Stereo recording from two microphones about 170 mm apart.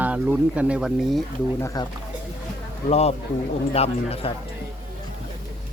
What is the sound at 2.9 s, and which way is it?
Speech, 40° left (ahead or behind).